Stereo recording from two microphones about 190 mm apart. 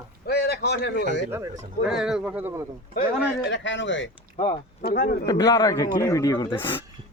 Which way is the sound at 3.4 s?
70° left (ahead or behind).